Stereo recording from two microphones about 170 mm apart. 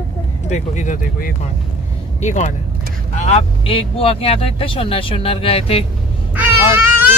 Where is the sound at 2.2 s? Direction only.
45° left (ahead or behind).